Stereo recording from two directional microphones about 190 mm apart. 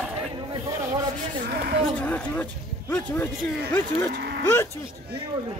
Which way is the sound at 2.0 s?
10° left (ahead or behind).